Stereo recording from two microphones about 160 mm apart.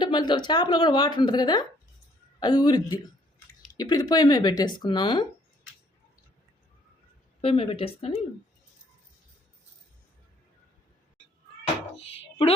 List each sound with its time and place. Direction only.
0.0 s a woman's voice: 30° left (ahead or behind)
7.4 s speech: 35° left (ahead or behind)
11.9 s a sound: 35° left (ahead or behind)